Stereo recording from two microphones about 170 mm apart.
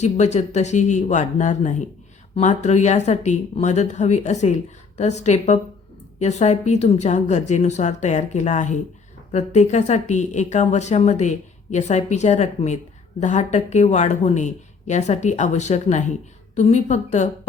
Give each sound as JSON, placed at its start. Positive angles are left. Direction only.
{"t": 0.0, "sound": "speech", "side_deg": 40}